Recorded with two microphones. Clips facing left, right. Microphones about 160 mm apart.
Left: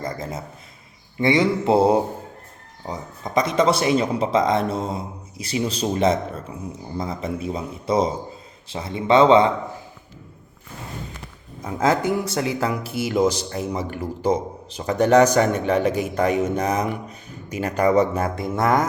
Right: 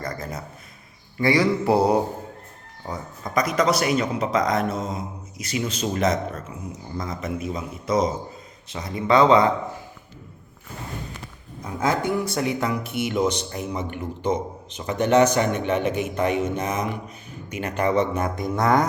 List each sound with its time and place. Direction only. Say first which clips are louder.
0.0 s a man's voice: left 2 dB; 25° left (ahead or behind)
11.6 s a man's voice: left 3 dB; 25° left (ahead or behind)